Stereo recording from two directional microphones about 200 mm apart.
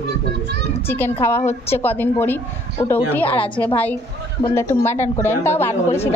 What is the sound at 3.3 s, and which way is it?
Speech, 25° left (ahead or behind).